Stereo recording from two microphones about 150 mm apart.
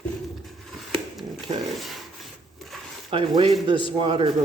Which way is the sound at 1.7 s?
Centre (ahead or behind).